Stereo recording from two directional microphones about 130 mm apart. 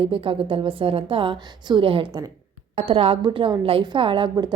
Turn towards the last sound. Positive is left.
turn(degrees=-40)  # may be behind; listen again after turning